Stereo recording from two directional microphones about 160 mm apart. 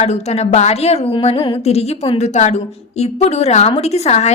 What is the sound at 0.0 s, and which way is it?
A woman's voice, 45° left (ahead or behind).